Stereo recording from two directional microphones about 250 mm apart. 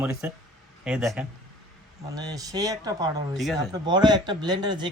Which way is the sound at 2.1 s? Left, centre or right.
Centre.